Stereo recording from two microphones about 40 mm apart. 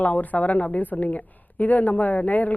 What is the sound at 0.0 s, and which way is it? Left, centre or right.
A woman's voice, left.